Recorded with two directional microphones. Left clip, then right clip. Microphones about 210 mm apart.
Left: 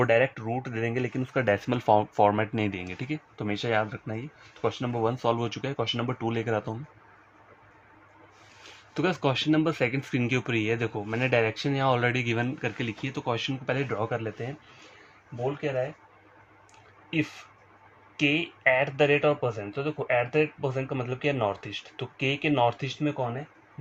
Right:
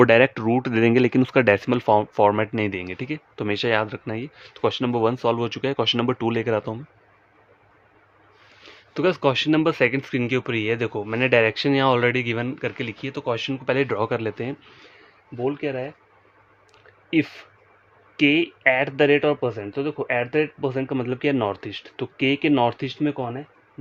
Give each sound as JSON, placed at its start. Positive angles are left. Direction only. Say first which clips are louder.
{"t": 0.0, "sound": "speech", "louder": "right 8 dB", "side_deg": -55}
{"t": 1.4, "sound": "speech", "louder": "right 6 dB", "side_deg": -35}
{"t": 8.9, "sound": "speech", "louder": "right 6 dB", "side_deg": -20}
{"t": 17.1, "sound": "speech", "louder": "right 7 dB", "side_deg": -55}